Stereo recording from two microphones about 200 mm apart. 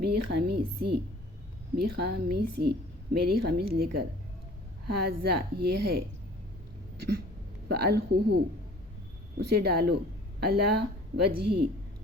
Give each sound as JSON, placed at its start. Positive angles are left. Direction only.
{"t": 0.0, "sound": "a woman's voice", "side_deg": -55}
{"t": 5.0, "sound": "a woman's voice", "side_deg": -50}
{"t": 7.7, "sound": "a woman's voice", "side_deg": -55}
{"t": 9.4, "sound": "a woman's voice", "side_deg": -50}